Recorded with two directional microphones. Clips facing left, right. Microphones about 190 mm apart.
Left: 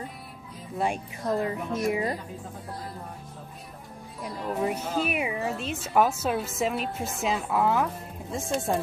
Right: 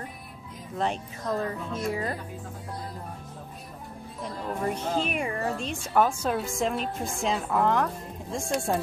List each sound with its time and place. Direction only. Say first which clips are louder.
0.7 s a woman's voice: left 1 dB; 10° left (ahead or behind)
4.2 s speech: left 2 dB; 5° left (ahead or behind)